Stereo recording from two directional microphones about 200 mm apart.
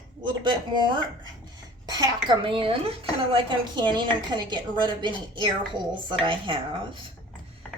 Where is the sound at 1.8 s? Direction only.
20° right (ahead or behind).